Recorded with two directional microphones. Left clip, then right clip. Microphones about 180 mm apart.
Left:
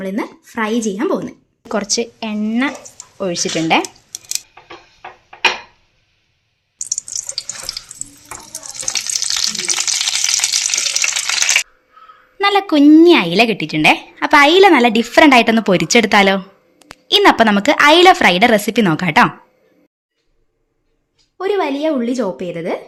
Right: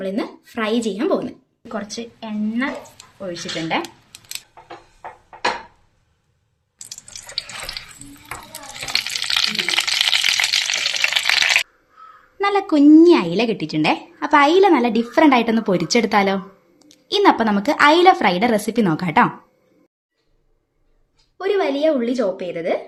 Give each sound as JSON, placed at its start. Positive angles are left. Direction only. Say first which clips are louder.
{"t": 0.0, "sound": "a woman's voice", "louder": "left 2 dB", "side_deg": 45}
{"t": 3.2, "sound": "a woman's voice", "louder": "left 8 dB", "side_deg": 45}
{"t": 8.9, "sound": "frying", "louder": "left 1 dB", "side_deg": 0}
{"t": 12.4, "sound": "a woman's voice", "louder": "left 4 dB", "side_deg": 10}
{"t": 21.3, "sound": "a woman's voice", "louder": "left 2 dB", "side_deg": 60}